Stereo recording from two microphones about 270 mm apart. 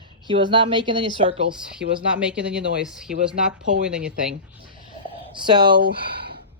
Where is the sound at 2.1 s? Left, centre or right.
Centre.